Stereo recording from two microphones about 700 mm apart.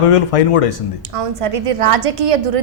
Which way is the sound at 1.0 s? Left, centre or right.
Right.